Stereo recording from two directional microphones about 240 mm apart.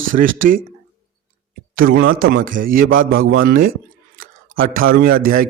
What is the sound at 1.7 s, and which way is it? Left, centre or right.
A man's voice, right.